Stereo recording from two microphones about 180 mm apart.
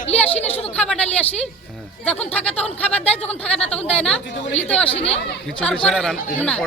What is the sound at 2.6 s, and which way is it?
Speech, 35° left (ahead or behind).